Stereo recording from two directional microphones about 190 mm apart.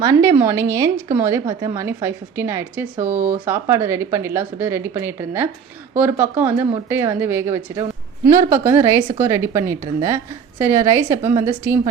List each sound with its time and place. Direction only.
0.0 s a woman's voice: 15° right (ahead or behind)